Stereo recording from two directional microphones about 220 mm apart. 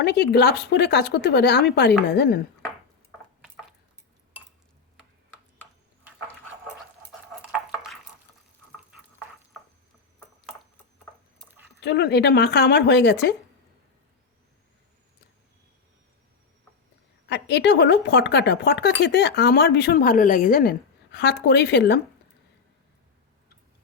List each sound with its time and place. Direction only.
0.0 s speech: 50° left (ahead or behind)
11.4 s a sound: 10° right (ahead or behind)
11.8 s speech: 50° left (ahead or behind)
17.2 s speech: 50° left (ahead or behind)